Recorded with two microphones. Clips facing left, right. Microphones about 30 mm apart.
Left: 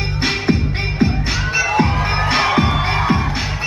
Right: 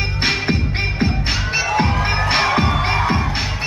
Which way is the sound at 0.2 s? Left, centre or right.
Centre.